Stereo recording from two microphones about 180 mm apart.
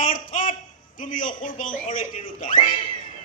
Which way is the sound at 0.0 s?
45° left (ahead or behind).